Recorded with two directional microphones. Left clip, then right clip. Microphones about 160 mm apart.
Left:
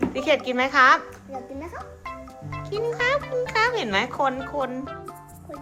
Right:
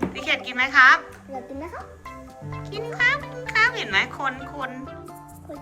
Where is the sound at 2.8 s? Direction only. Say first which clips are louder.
Right 2 dB; 40° left (ahead or behind).